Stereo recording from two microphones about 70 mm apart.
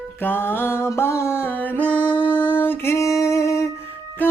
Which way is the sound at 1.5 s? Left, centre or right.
Left.